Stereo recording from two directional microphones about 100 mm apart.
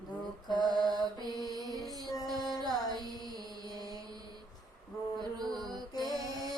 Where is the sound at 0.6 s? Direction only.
45° right (ahead or behind).